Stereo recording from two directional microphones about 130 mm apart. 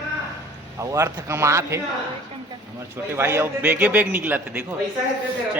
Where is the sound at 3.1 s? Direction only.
20° right (ahead or behind).